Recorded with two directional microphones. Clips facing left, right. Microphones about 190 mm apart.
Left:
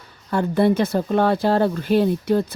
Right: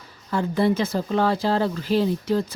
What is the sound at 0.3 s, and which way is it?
Speech, 60° left (ahead or behind).